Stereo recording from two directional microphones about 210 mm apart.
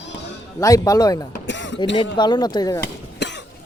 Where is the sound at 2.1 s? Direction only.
20° left (ahead or behind).